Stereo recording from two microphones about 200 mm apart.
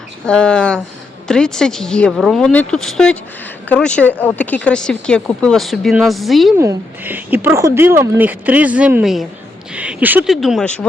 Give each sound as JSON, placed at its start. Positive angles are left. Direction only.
{"t": 0.3, "sound": "speech", "side_deg": 5}
{"t": 6.6, "sound": "speech", "side_deg": -10}